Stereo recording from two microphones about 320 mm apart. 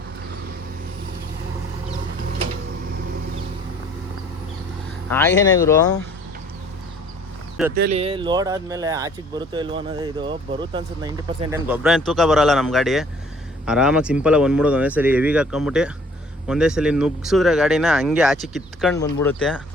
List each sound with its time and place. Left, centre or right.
5.0 s speech: centre
7.8 s speech: right; by 19.6 s centre